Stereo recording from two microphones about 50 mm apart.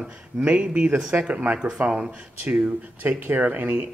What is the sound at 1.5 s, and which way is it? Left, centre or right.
Speech, centre.